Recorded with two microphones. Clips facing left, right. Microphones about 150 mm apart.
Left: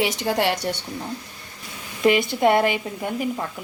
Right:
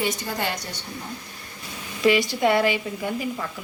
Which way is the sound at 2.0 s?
55° left (ahead or behind).